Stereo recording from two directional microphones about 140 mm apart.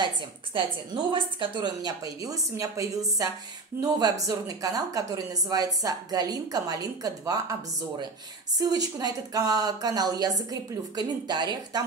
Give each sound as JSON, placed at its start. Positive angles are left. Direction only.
{"t": 1.1, "sound": "speech", "side_deg": -35}
{"t": 8.5, "sound": "speech", "side_deg": -25}